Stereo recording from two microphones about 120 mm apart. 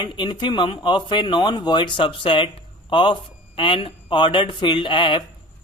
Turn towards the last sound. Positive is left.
turn(degrees=40)  # may be behind; listen again after turning